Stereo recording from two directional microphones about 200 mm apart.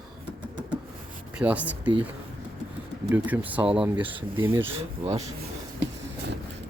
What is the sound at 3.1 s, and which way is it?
Speech, 10° right (ahead or behind).